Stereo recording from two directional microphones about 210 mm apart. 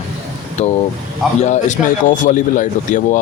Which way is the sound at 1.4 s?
35° left (ahead or behind).